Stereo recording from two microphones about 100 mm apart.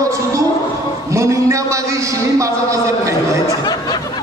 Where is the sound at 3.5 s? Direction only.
45° left (ahead or behind).